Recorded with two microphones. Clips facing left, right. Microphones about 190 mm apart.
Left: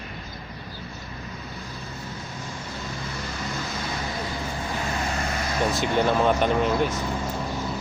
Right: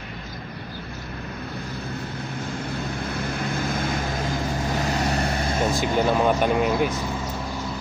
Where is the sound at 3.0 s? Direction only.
60° right (ahead or behind).